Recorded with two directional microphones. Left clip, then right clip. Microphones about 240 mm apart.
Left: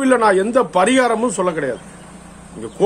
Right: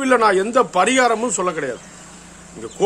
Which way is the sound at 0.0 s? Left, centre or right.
Centre.